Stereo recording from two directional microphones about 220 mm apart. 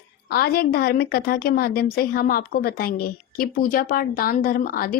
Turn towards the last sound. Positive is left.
turn(degrees=40)  # may be behind; listen again after turning